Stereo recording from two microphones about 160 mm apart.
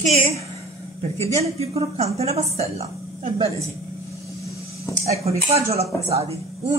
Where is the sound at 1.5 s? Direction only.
40° right (ahead or behind).